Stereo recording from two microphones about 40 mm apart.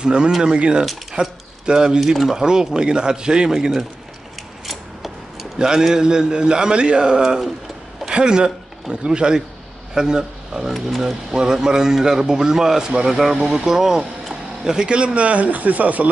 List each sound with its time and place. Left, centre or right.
0.0 s a man's voice: right
2.0 s speech: centre
4.6 s scissors: centre
5.6 s a man's voice: centre
13.4 s a man's voice: right
13.7 s speech: centre; by 16.1 s right